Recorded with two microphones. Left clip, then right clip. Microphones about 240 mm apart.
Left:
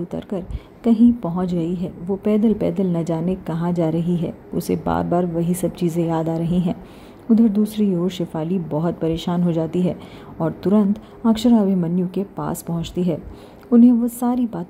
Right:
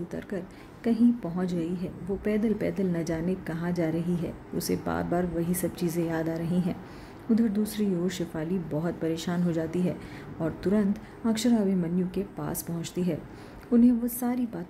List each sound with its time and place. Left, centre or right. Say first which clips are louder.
0.8 s a woman's voice: left 9 dB; centre